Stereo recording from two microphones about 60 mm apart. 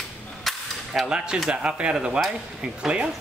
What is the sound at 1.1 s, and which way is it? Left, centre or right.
Speech, centre.